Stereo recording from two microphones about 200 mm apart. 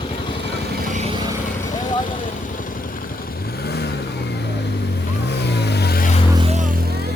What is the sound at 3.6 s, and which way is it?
Vehicle, 55° left (ahead or behind).